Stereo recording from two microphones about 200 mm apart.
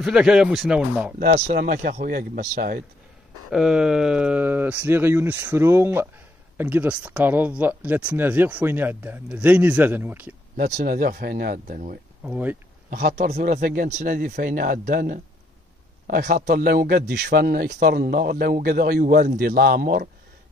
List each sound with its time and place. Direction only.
0.0 s speech: 5° right (ahead or behind)
1.2 s speech: 45° right (ahead or behind)
3.4 s speech: 5° right (ahead or behind)
10.5 s speech: 50° right (ahead or behind)
12.2 s speech: 5° right (ahead or behind)
12.9 s speech: 45° right (ahead or behind)